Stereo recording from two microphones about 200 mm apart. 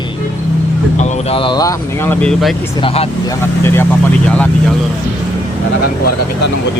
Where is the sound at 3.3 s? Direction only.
10° left (ahead or behind).